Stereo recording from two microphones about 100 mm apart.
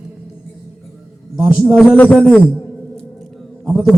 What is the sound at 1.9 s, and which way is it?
Speech, 15° left (ahead or behind).